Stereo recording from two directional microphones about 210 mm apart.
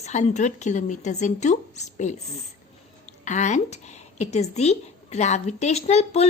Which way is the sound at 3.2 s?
35° left (ahead or behind).